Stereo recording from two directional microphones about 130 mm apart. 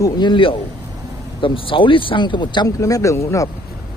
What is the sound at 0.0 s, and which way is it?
Speech, 35° left (ahead or behind).